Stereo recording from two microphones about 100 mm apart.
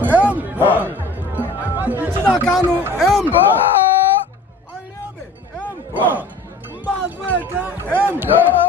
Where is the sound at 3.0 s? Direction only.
5° left (ahead or behind).